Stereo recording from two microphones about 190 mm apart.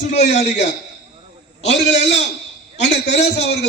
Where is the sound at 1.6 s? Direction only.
65° left (ahead or behind).